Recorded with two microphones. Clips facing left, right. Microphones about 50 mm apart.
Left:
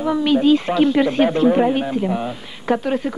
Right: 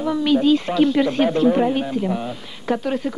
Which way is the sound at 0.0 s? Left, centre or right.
Left.